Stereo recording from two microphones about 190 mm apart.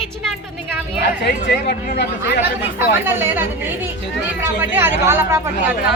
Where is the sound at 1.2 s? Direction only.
60° left (ahead or behind).